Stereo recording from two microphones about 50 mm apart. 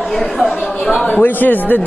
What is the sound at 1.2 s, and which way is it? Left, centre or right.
Speech, left.